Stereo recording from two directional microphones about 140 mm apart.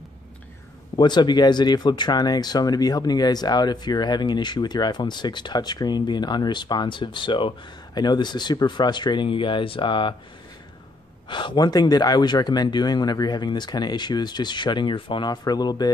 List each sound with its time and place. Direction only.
0.9 s speech: 30° left (ahead or behind)
11.2 s speech: 35° left (ahead or behind)